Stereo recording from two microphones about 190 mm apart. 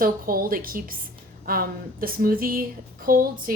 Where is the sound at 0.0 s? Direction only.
50° right (ahead or behind).